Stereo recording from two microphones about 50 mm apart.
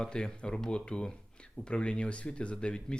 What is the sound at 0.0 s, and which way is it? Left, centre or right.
Speech, centre.